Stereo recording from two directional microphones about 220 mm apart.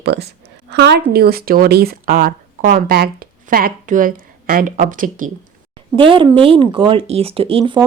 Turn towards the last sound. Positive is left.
turn(degrees=-25)  # may be behind; listen again after turning